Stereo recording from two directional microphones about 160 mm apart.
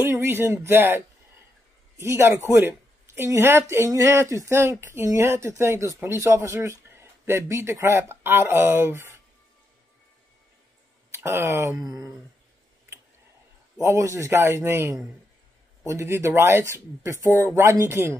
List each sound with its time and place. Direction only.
0.0 s speech: 15° right (ahead or behind)
11.1 s speech: 15° right (ahead or behind)
13.7 s speech: 20° right (ahead or behind)